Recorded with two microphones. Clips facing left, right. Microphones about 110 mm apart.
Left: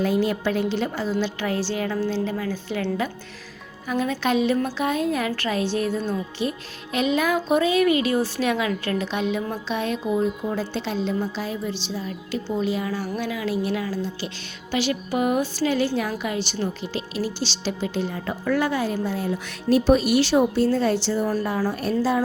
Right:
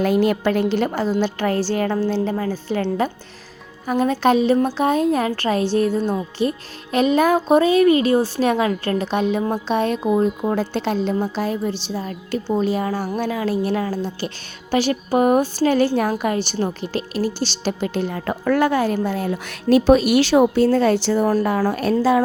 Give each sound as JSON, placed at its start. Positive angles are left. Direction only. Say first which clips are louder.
{"t": 0.0, "sound": "a woman's voice", "louder": "right 4 dB", "side_deg": -65}
{"t": 3.8, "sound": "a woman's voice", "louder": "right 6 dB", "side_deg": -45}
{"t": 19.7, "sound": "speech", "louder": "right 4 dB", "side_deg": -85}
{"t": 20.7, "sound": "a woman's voice", "louder": "right 5 dB", "side_deg": -60}